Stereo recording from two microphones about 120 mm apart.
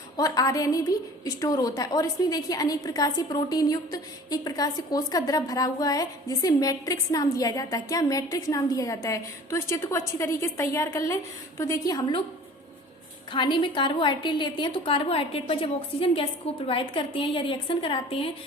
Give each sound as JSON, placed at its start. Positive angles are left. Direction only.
{"t": 0.2, "sound": "a woman's voice", "side_deg": 30}
{"t": 13.3, "sound": "a woman's voice", "side_deg": 40}